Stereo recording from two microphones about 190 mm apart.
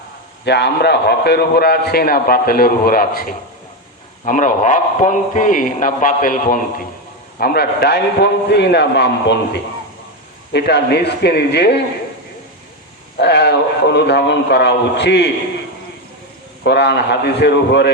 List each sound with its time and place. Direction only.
0.4 s a man's voice: 60° left (ahead or behind)
13.1 s a man's voice: 65° left (ahead or behind)
16.6 s a man's voice: 60° left (ahead or behind)